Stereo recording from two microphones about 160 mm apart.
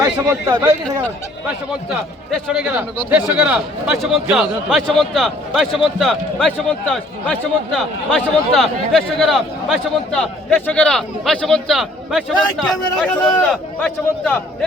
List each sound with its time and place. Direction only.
0.0 s a man's voice: 20° right (ahead or behind)
1.9 s a man's voice: 5° right (ahead or behind)